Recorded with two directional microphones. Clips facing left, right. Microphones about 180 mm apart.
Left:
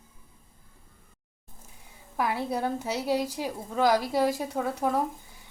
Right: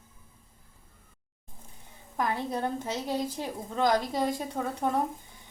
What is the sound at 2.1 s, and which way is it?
A woman's voice, 10° left (ahead or behind).